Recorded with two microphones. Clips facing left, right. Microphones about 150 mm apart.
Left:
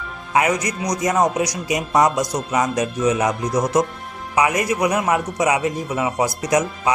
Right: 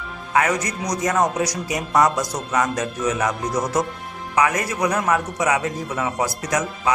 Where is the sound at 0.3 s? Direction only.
15° left (ahead or behind).